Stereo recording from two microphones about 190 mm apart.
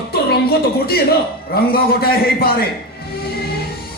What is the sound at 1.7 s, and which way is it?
Speech, 55° left (ahead or behind).